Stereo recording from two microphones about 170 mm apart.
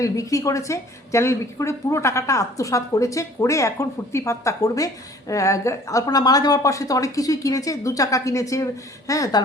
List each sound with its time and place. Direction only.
0.0 s a woman's voice: 20° left (ahead or behind)